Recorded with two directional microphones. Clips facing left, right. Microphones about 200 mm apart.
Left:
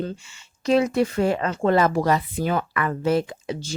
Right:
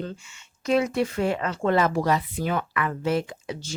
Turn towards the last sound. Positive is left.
turn(degrees=30)  # may be behind; listen again after turning